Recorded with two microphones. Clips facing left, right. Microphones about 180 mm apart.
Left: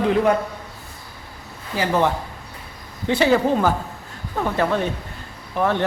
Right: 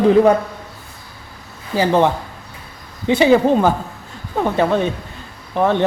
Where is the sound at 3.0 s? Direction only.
15° right (ahead or behind).